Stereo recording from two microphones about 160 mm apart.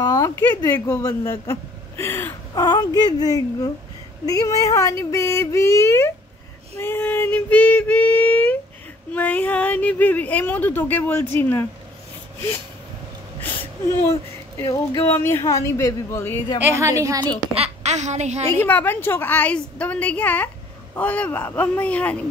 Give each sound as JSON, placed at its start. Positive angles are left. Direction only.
{"t": 0.0, "sound": "speech", "side_deg": 25}
{"t": 6.8, "sound": "female singing", "side_deg": 15}
{"t": 9.1, "sound": "speech", "side_deg": 10}
{"t": 13.6, "sound": "a sound", "side_deg": 15}
{"t": 14.6, "sound": "speech", "side_deg": 20}
{"t": 16.5, "sound": "a woman's voice", "side_deg": -15}
{"t": 17.6, "sound": "a child's voice", "side_deg": -45}
{"t": 18.5, "sound": "speech", "side_deg": 15}